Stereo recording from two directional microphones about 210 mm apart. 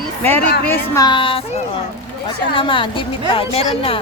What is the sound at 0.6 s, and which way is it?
Speech, 10° left (ahead or behind).